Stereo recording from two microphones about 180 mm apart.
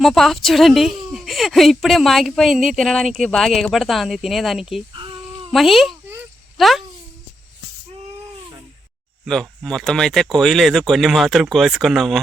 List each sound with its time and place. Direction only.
0.0 s speech: centre (ahead or behind)
4.9 s a sound: 25° right (ahead or behind)
5.5 s speech: centre (ahead or behind)
9.2 s speech: 5° left (ahead or behind)